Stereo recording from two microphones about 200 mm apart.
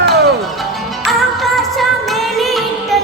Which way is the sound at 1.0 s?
Centre (ahead or behind).